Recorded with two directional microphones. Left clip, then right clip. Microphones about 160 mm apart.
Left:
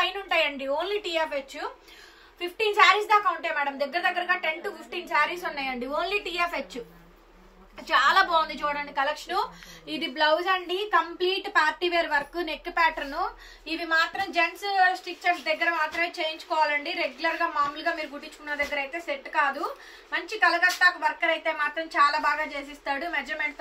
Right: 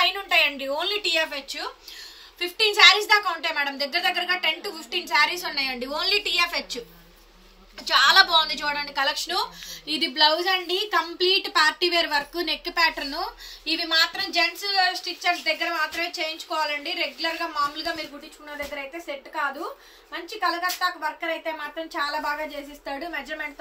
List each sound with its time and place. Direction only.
0.0 s a sound: 20° left (ahead or behind)
1.2 s a woman's voice: 15° left (ahead or behind)
2.8 s a woman's voice: 15° left (ahead or behind)
7.8 s a woman's voice: 15° left (ahead or behind); by 23.2 s centre (ahead or behind)